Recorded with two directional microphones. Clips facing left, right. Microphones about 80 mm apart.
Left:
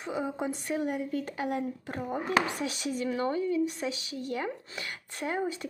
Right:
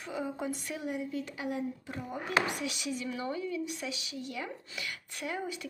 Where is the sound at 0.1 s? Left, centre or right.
Left.